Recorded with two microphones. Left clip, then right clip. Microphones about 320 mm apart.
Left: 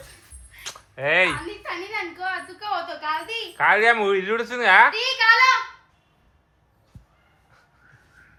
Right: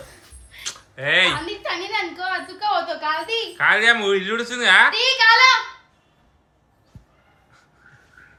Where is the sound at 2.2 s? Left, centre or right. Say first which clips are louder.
Right 4 dB; right.